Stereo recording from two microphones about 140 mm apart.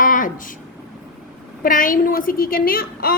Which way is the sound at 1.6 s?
75° left (ahead or behind).